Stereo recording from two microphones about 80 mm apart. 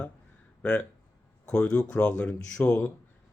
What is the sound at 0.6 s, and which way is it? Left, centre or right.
Speech, centre.